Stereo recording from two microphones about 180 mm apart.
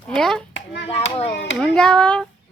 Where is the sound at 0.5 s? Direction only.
80° left.